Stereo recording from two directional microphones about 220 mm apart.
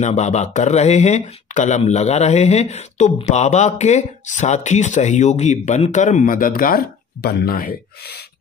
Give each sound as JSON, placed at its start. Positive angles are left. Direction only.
{"t": 0.0, "sound": "speech", "side_deg": 30}